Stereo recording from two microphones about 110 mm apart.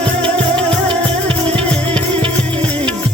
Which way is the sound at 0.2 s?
10° left (ahead or behind).